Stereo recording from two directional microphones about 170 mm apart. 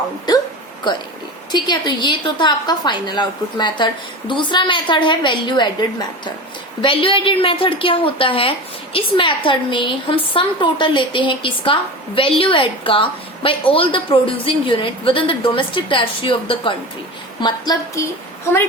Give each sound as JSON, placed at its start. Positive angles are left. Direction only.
{"t": 1.5, "sound": "a woman's voice", "side_deg": 25}